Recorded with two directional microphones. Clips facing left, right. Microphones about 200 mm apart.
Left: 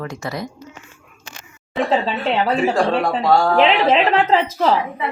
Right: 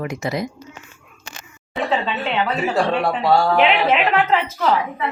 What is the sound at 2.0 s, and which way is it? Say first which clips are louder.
A woman's voice: left 3 dB; 35° left (ahead or behind).